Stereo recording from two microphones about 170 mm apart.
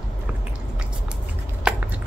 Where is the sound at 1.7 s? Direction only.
5° right (ahead or behind).